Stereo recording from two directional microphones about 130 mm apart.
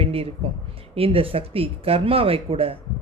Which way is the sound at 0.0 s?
50° right (ahead or behind).